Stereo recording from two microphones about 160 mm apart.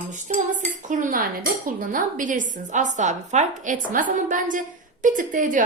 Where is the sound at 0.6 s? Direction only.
50° right (ahead or behind).